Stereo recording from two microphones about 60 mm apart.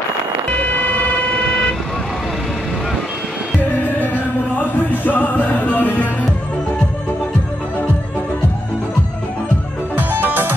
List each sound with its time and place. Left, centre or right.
0.5 s vehicle: left
5.0 s music: left
9.9 s music: right